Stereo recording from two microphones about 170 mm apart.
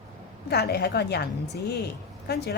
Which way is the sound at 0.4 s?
70° left (ahead or behind).